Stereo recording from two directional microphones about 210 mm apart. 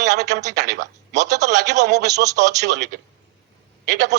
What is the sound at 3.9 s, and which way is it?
Speech, 50° right (ahead or behind).